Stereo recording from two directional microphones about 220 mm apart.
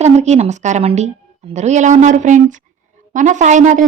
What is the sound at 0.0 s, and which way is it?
Speech, 30° right (ahead or behind).